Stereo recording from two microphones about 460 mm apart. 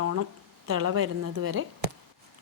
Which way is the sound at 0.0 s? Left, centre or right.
Right.